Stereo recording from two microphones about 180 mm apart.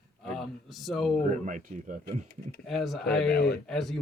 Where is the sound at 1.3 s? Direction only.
45° right (ahead or behind).